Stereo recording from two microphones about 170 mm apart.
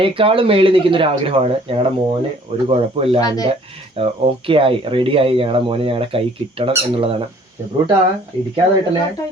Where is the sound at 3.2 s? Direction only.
20° left (ahead or behind).